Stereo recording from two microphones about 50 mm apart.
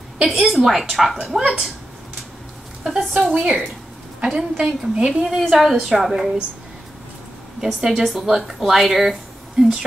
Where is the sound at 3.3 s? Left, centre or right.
Right.